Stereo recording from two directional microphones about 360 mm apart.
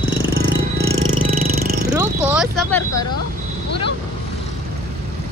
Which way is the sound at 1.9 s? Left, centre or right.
Centre.